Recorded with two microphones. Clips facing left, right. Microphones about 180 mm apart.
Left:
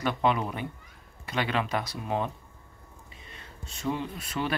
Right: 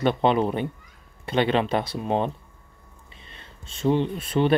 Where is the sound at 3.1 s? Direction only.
30° right (ahead or behind).